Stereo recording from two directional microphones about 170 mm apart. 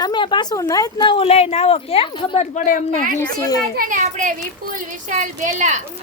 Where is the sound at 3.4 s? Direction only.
20° left (ahead or behind).